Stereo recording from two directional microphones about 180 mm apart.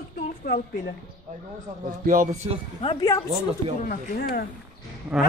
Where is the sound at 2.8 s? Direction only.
30° left (ahead or behind).